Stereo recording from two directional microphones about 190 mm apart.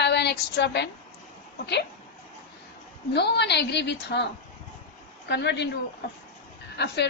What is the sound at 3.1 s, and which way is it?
A woman's voice, 65° left (ahead or behind).